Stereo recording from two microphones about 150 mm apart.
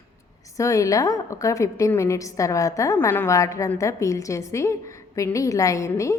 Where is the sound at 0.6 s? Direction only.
20° left (ahead or behind).